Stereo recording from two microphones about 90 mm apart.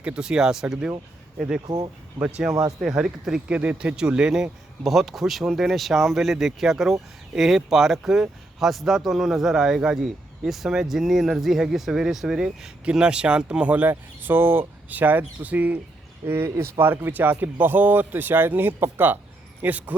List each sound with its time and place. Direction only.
0.0 s speech: 10° right (ahead or behind)
1.6 s speech: 45° right (ahead or behind)
2.8 s speech: 5° right (ahead or behind)
16.2 s speech: 30° right (ahead or behind)